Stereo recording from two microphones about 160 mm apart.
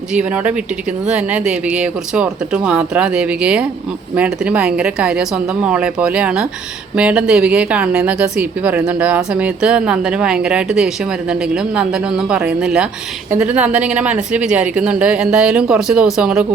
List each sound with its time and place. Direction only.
0.1 s a woman's voice: 5° right (ahead or behind)